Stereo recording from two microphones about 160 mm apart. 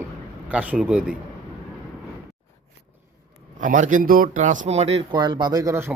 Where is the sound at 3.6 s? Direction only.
55° right (ahead or behind).